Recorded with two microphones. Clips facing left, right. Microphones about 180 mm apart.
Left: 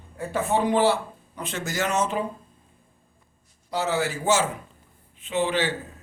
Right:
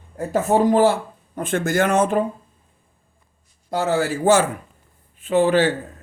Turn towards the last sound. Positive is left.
turn(degrees=-45)  # may be behind; listen again after turning